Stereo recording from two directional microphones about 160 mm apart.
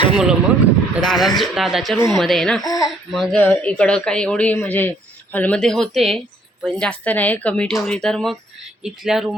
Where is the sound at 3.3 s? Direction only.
15° left (ahead or behind).